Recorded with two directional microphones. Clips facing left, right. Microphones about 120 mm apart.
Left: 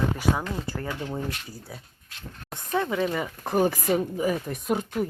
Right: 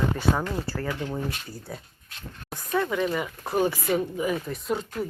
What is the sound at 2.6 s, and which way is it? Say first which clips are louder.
Speech: even; 25° left (ahead or behind).